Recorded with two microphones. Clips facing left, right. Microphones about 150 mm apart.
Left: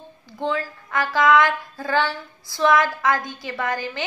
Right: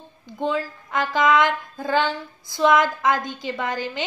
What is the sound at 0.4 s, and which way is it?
Speech, 15° right (ahead or behind).